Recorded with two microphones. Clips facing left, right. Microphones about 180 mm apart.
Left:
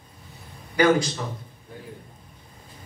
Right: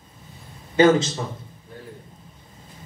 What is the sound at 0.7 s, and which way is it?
Speech, 25° right (ahead or behind).